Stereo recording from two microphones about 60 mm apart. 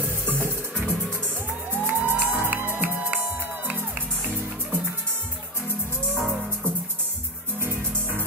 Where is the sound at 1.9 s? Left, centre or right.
Right.